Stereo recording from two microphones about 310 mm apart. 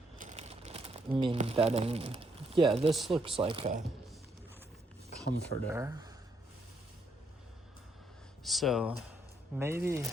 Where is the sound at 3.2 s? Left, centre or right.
Centre.